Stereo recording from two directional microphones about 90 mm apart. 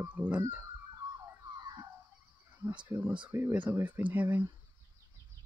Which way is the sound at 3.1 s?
15° right (ahead or behind).